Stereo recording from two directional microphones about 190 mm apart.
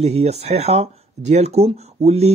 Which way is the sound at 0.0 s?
35° right (ahead or behind).